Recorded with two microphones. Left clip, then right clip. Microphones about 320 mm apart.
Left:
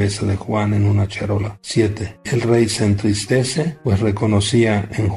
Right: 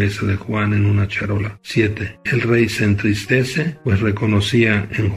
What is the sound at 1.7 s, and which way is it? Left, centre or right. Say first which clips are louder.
Speech: even; left.